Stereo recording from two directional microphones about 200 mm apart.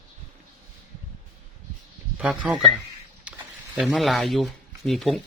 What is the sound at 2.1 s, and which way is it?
Speech, 5° right (ahead or behind).